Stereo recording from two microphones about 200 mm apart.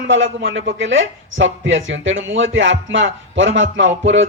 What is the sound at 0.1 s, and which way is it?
Speech, 70° right (ahead or behind).